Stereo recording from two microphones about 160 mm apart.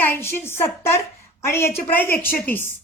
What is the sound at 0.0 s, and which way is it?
A woman's voice, 15° left (ahead or behind).